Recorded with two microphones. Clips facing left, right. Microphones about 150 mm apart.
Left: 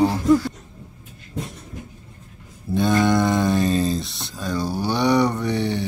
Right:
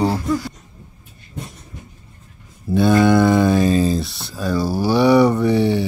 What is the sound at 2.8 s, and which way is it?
Mantra, 5° right (ahead or behind).